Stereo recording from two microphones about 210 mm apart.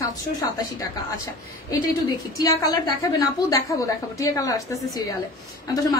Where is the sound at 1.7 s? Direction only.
15° left (ahead or behind).